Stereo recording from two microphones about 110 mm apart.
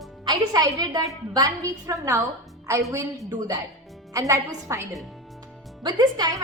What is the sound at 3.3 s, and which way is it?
A woman's voice, 30° right (ahead or behind).